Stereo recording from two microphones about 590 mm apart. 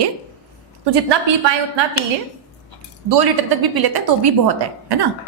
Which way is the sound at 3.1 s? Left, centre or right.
Right.